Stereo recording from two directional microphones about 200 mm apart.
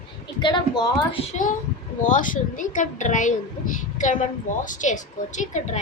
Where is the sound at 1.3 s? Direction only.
40° left (ahead or behind).